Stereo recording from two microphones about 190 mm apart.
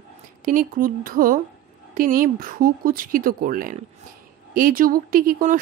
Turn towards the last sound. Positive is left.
turn(degrees=-50)  # may be behind; listen again after turning